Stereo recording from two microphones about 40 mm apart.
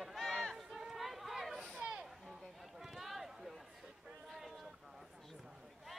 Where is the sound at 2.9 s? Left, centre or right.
Centre.